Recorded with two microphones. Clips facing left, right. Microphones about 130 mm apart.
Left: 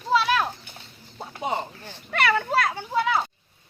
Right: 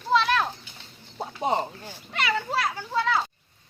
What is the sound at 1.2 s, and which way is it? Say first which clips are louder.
Speech: right 3 dB; 35° right (ahead or behind).